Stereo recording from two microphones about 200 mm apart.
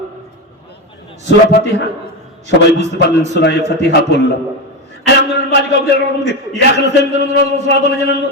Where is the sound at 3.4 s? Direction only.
60° left (ahead or behind).